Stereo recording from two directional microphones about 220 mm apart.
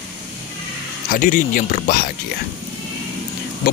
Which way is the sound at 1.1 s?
40° left (ahead or behind).